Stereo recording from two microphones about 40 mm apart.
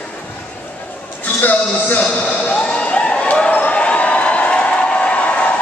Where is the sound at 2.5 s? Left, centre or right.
Left.